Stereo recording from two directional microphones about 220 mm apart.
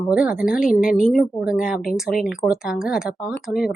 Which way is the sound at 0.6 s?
40° left (ahead or behind).